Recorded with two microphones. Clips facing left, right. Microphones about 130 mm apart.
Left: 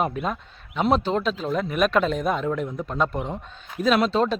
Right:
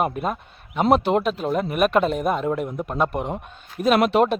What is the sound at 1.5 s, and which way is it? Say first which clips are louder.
Speech: right 2 dB; 10° right (ahead or behind).